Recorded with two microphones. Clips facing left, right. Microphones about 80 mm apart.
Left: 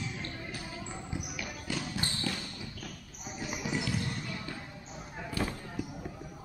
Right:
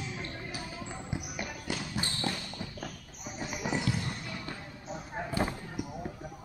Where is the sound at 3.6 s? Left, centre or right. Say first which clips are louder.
Right 2 dB; right.